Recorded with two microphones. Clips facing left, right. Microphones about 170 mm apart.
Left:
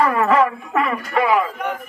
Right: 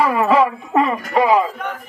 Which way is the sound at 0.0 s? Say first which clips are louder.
Right 1 dB; 15° right (ahead or behind).